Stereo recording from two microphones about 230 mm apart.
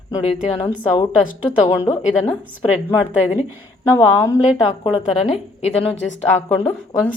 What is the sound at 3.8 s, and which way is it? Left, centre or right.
Speech, centre.